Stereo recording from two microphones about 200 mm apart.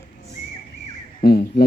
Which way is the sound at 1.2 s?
50° left (ahead or behind).